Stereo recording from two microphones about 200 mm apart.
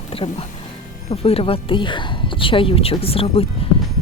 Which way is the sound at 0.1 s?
30° left (ahead or behind).